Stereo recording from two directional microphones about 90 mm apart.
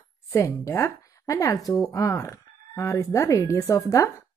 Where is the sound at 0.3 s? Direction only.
30° left (ahead or behind).